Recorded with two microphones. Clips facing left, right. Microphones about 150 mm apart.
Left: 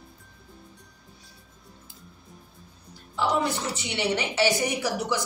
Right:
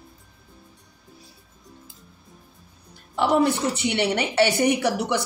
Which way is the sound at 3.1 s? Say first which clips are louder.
Right 6 dB; 60° right (ahead or behind).